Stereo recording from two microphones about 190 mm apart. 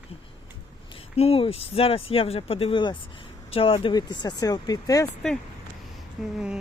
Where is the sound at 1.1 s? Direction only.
30° left (ahead or behind).